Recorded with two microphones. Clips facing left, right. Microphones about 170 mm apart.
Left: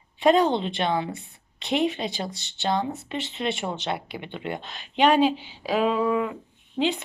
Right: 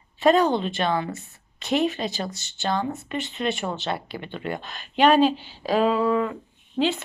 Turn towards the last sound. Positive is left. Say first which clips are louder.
# right 1 dB
turn(degrees=15)  # may be behind; listen again after turning